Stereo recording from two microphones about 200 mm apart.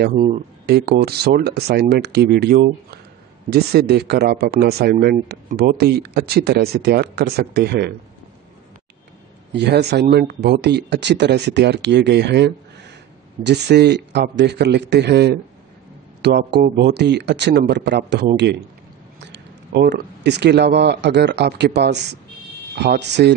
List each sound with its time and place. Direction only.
0.1 s speech: 35° right (ahead or behind)
0.7 s speech: 50° right (ahead or behind)
9.5 s speech: 55° right (ahead or behind)